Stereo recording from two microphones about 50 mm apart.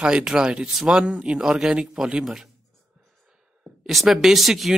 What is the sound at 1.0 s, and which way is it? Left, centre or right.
A man's voice, right.